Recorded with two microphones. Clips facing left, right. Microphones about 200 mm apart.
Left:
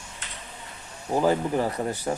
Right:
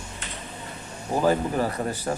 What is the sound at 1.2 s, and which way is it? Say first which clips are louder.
Speech: right 1 dB; 15° left (ahead or behind).